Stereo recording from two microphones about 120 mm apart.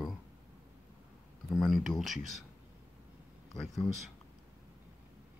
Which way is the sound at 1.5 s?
Centre (ahead or behind).